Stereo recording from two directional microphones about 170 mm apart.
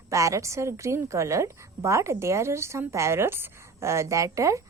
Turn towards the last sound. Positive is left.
turn(degrees=-20)  # may be behind; listen again after turning